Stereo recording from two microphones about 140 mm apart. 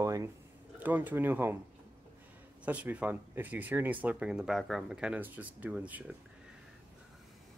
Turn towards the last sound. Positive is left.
turn(degrees=-10)  # may be behind; listen again after turning